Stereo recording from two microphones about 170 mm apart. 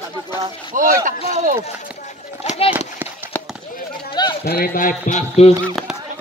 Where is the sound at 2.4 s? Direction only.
35° left (ahead or behind).